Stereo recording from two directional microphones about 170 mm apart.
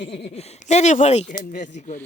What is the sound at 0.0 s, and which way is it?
Speech, 35° left (ahead or behind).